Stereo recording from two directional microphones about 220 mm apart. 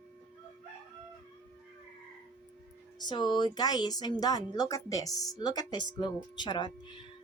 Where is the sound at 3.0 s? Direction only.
20° left (ahead or behind).